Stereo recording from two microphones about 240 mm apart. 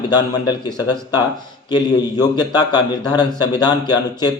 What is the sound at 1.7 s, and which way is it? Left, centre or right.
Speech, centre.